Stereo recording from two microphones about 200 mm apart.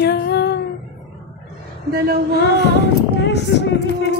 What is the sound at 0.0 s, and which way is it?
Female singing, 55° left (ahead or behind).